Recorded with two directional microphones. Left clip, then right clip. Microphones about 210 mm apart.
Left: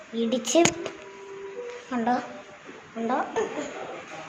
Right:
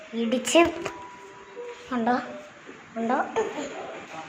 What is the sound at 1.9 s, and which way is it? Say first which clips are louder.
Speech: right 1 dB; centre (ahead or behind).